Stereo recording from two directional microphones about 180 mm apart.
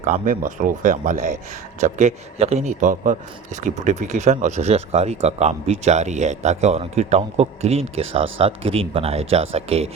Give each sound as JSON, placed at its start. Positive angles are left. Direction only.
{"t": 0.0, "sound": "a man's voice", "side_deg": -45}